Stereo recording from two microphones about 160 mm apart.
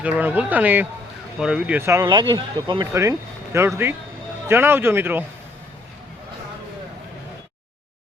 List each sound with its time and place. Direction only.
0.0 s speech: 10° right (ahead or behind)